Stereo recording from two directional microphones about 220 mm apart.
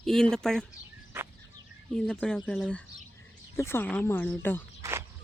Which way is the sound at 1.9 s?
5° left (ahead or behind).